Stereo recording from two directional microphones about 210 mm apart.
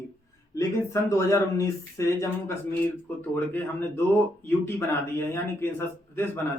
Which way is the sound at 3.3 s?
10° left (ahead or behind).